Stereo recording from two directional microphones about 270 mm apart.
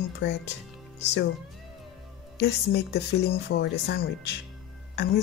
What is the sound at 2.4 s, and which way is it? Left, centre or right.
Speech, left.